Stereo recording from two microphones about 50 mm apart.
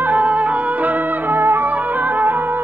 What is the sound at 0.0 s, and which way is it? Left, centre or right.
Music, right.